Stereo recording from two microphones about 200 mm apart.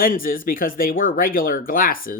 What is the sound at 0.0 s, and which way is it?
Speech, 45° left (ahead or behind).